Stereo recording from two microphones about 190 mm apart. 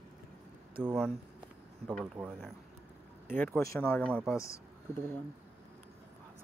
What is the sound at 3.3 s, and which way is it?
Speech, 10° left (ahead or behind).